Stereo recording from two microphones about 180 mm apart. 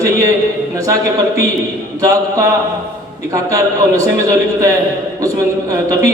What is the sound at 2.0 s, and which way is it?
Speech, 20° right (ahead or behind).